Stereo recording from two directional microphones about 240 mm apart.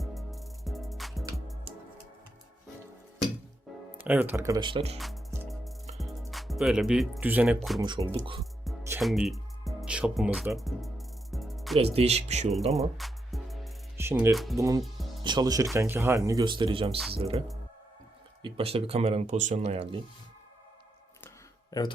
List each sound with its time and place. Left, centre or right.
0.0 s music: centre
4.0 s speech: centre; by 4.9 s right
4.9 s music: centre
6.3 s speech: centre
7.8 s speech: centre
9.0 s music: centre
11.8 s speech: right
13.0 s music: centre
13.9 s speech: centre
14.6 s speech: centre
18.4 s speech: right
21.7 s speech: centre